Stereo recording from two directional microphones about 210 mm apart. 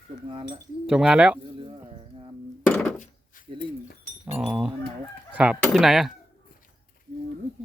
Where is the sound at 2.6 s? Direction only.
10° left (ahead or behind).